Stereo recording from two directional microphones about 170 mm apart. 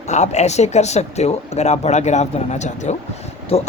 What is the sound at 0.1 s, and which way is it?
Speech, 40° left (ahead or behind).